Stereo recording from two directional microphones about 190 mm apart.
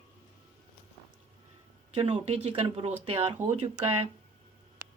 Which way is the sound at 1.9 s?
30° right (ahead or behind).